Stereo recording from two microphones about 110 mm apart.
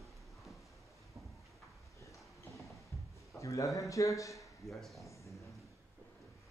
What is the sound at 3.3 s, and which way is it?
A man's voice, 30° left (ahead or behind).